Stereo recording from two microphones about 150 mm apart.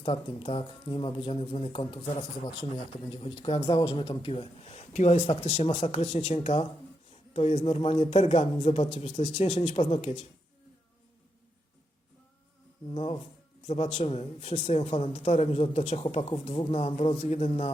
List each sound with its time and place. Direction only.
0.0 s a man's voice: 35° left (ahead or behind)
12.9 s a man's voice: 40° left (ahead or behind)